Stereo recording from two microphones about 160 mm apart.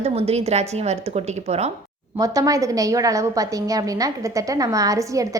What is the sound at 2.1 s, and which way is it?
A woman's voice, 20° right (ahead or behind).